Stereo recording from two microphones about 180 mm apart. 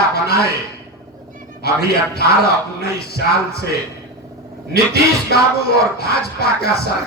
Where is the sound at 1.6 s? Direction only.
60° left (ahead or behind).